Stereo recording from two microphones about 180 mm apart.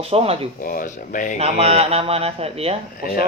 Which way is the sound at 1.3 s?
35° right (ahead or behind).